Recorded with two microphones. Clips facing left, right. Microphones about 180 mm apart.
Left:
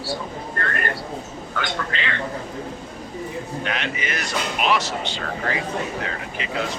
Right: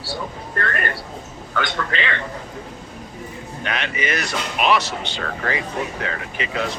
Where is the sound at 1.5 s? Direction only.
75° right (ahead or behind).